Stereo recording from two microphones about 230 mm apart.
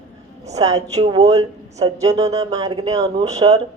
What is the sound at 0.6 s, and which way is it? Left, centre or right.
Speech, right.